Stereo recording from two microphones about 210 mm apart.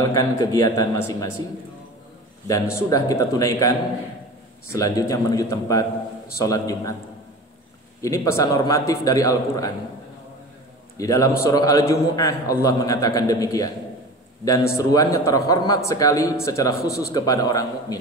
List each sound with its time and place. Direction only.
0.1 s a man's voice: 15° left (ahead or behind)
2.4 s a man's voice: 15° left (ahead or behind)
4.7 s a man's voice: 15° left (ahead or behind)
8.0 s a man's voice: 15° left (ahead or behind)
11.0 s a man's voice: 15° left (ahead or behind)